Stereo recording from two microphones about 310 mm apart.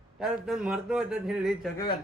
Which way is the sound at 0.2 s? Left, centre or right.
Centre.